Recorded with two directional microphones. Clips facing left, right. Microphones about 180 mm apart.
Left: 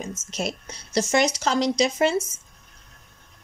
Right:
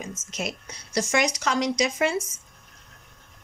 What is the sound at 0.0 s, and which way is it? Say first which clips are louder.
Speech: left 3 dB; 30° left (ahead or behind).